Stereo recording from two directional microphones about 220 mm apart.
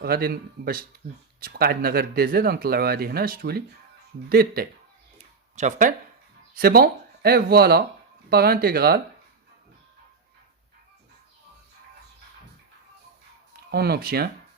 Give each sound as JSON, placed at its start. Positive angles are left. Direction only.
{"t": 0.0, "sound": "speech", "side_deg": -45}
{"t": 5.1, "sound": "a sound", "side_deg": -30}
{"t": 6.6, "sound": "speech", "side_deg": -45}
{"t": 13.7, "sound": "speech", "side_deg": -45}